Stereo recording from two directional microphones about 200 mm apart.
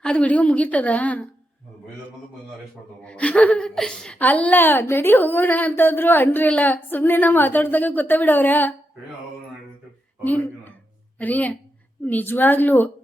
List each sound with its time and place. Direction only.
0.0 s a woman's voice: 5° left (ahead or behind)
3.0 s a woman's voice: 5° left (ahead or behind)
10.2 s a woman's voice: 10° left (ahead or behind)